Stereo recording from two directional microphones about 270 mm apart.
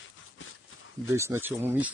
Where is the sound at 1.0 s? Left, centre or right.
Centre.